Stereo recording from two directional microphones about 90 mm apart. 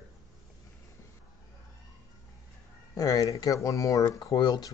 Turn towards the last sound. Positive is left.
turn(degrees=50)  # may be behind; listen again after turning